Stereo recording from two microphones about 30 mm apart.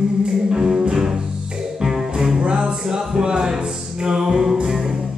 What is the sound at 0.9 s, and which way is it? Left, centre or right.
Cello, right.